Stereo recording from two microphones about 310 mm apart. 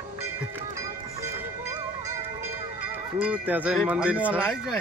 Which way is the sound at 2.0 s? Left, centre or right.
Centre.